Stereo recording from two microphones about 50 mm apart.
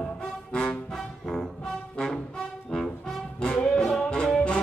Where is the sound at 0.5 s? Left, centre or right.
Left.